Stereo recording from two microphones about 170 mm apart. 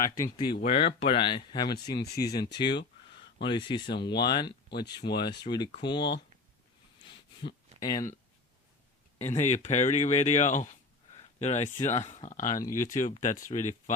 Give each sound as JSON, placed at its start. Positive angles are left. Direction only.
{"t": 0.0, "sound": "speech", "side_deg": 20}
{"t": 0.6, "sound": "speech", "side_deg": 35}
{"t": 7.0, "sound": "a sound", "side_deg": 30}
{"t": 7.8, "sound": "speech", "side_deg": 20}
{"t": 9.4, "sound": "speech", "side_deg": 45}